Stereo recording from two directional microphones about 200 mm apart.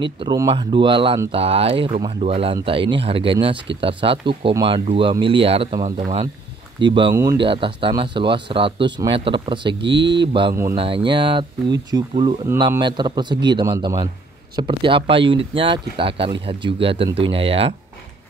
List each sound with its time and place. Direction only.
0.0 s speech: 20° right (ahead or behind)
9.8 s speech: 60° right (ahead or behind)
10.5 s speech: 15° right (ahead or behind)
10.8 s speech: 25° right (ahead or behind)